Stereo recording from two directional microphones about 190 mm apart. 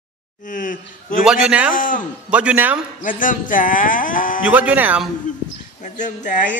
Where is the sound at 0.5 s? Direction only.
45° left (ahead or behind).